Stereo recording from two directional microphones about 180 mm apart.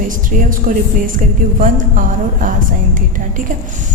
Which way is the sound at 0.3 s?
50° right (ahead or behind).